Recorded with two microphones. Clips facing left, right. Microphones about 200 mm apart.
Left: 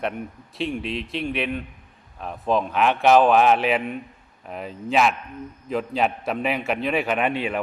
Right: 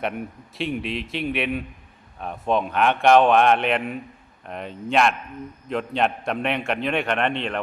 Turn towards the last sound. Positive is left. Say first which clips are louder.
# left 1 dB
turn(degrees=5)  # may be behind; listen again after turning